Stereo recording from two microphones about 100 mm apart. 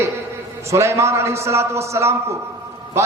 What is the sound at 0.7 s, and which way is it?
A man's voice, 30° right (ahead or behind).